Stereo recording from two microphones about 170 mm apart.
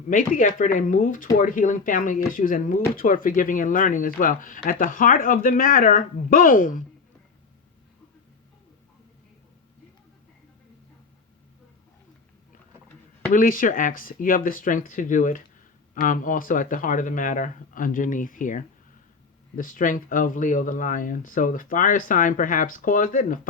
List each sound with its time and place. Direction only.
0.1 s speech: 50° left (ahead or behind)
13.3 s speech: 55° left (ahead or behind)